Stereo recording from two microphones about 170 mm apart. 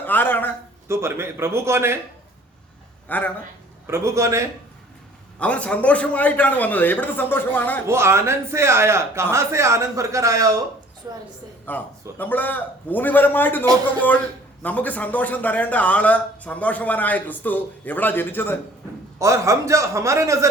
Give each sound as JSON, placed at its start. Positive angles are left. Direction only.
{"t": 0.0, "sound": "a sound", "side_deg": 10}
{"t": 0.9, "sound": "speech", "side_deg": -15}
{"t": 3.1, "sound": "speech", "side_deg": 10}
{"t": 3.8, "sound": "speech", "side_deg": -15}
{"t": 5.4, "sound": "speech", "side_deg": 10}
{"t": 7.9, "sound": "a woman's voice", "side_deg": -15}
{"t": 11.7, "sound": "speech", "side_deg": 10}
{"t": 19.2, "sound": "speech", "side_deg": -15}